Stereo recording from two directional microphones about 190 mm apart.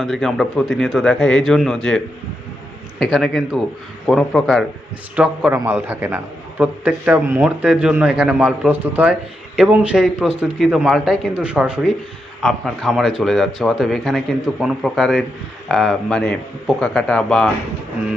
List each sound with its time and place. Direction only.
0.0 s speech: centre (ahead or behind)
3.0 s a man's voice: centre (ahead or behind)